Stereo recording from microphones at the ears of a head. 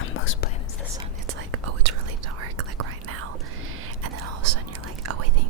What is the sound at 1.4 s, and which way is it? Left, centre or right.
Whispering, right.